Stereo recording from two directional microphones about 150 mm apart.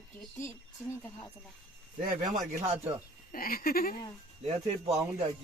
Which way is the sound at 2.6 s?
45° right (ahead or behind).